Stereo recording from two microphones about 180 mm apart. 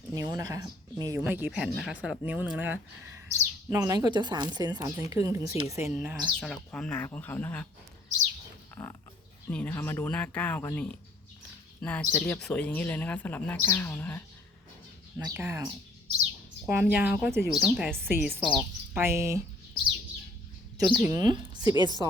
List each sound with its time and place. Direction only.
0.1 s speech: 20° right (ahead or behind)
1.2 s speech: 10° right (ahead or behind); by 7.7 s 10° left (ahead or behind)
8.7 s pig: 10° left (ahead or behind)
9.5 s speech: 10° left (ahead or behind)
15.2 s a woman's voice: 15° right (ahead or behind)
20.7 s a woman's voice: 15° right (ahead or behind)